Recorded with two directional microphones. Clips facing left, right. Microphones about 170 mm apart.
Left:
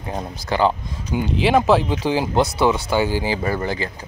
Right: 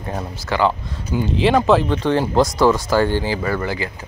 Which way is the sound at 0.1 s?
15° left (ahead or behind).